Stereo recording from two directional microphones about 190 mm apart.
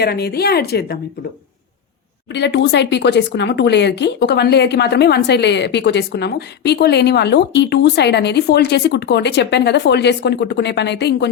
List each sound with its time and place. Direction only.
0.0 s speech: 55° left (ahead or behind)
2.3 s speech: 65° left (ahead or behind)